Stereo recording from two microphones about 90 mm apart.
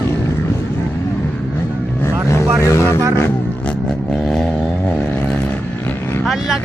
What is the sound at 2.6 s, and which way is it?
Speech, 35° left (ahead or behind).